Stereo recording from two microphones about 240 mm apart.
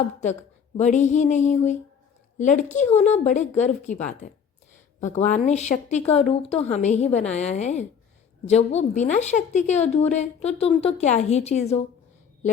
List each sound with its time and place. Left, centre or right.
0.8 s a woman's voice: left